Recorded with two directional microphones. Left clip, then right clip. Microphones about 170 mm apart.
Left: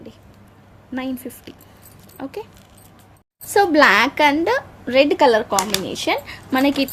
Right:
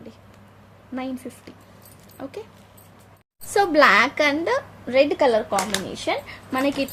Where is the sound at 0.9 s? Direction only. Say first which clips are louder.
Left 3 dB; 25° left (ahead or behind).